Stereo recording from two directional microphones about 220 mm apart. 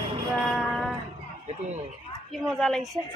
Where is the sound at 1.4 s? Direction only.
30° right (ahead or behind).